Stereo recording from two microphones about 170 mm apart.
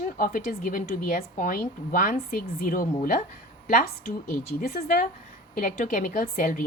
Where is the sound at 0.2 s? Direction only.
55° left (ahead or behind).